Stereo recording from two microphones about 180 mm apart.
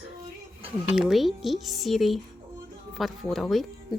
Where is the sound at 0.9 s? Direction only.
Centre (ahead or behind).